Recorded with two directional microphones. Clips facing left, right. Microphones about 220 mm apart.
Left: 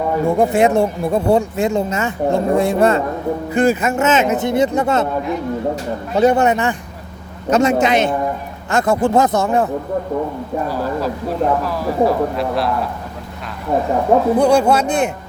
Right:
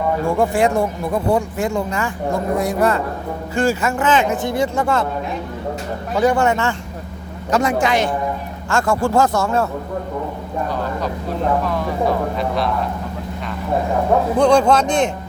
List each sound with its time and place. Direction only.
0.3 s speech: 20° left (ahead or behind)
6.1 s speech: 20° left (ahead or behind)
11.6 s speech: 5° left (ahead or behind)
14.3 s speech: 10° left (ahead or behind)